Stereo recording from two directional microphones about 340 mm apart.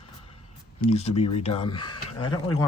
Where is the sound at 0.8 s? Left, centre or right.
Centre.